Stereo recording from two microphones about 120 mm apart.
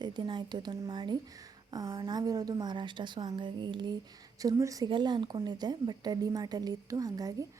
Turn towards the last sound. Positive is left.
turn(degrees=-30)  # may be behind; listen again after turning